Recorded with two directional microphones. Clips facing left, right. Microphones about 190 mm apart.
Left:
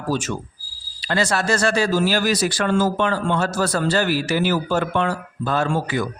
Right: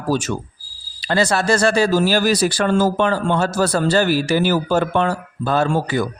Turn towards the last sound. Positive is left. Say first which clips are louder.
# right 3 dB
turn(degrees=-35)  # may be behind; listen again after turning